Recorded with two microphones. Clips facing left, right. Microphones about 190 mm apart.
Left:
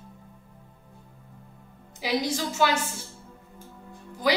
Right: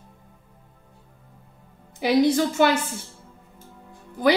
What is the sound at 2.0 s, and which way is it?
Speech, 55° right (ahead or behind).